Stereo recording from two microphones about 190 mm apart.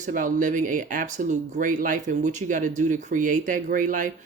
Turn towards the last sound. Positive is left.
turn(degrees=-45)  # may be behind; listen again after turning